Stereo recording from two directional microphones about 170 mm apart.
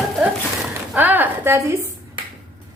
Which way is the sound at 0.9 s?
10° right (ahead or behind).